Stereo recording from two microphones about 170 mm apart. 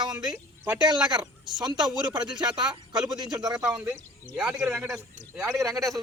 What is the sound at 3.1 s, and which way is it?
Speech, 25° right (ahead or behind).